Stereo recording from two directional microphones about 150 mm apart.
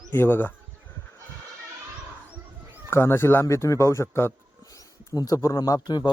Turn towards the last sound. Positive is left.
turn(degrees=25)  # may be behind; listen again after turning